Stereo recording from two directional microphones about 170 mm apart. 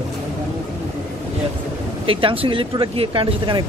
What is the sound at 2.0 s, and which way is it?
Speech, 30° right (ahead or behind).